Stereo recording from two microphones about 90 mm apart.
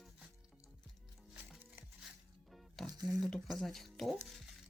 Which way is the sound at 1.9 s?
Centre (ahead or behind).